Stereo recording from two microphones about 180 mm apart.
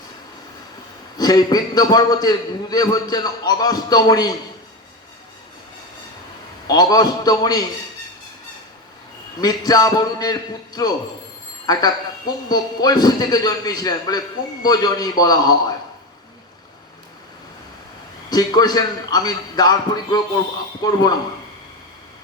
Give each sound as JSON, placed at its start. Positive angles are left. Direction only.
{"t": 1.1, "sound": "a man's voice", "side_deg": 20}
{"t": 6.7, "sound": "a man's voice", "side_deg": 20}
{"t": 9.4, "sound": "a man's voice", "side_deg": 20}
{"t": 18.3, "sound": "a man's voice", "side_deg": 20}